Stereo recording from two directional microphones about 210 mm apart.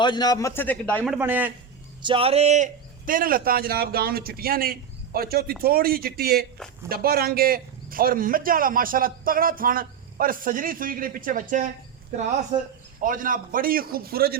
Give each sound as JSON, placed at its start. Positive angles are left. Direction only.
{"t": 0.0, "sound": "a man's voice", "side_deg": 20}
{"t": 2.0, "sound": "a man's voice", "side_deg": -25}
{"t": 13.0, "sound": "a man's voice", "side_deg": -40}